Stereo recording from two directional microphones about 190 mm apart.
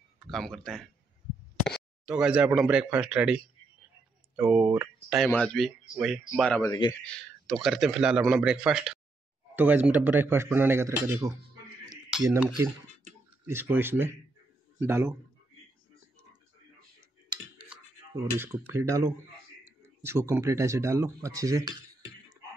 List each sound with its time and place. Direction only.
0.3 s a man's voice: centre (ahead or behind)
2.0 s a man's voice: 5° right (ahead or behind)
6.6 s a man's voice: 15° left (ahead or behind); by 15.1 s 10° right (ahead or behind)
18.4 s speech: 15° right (ahead or behind)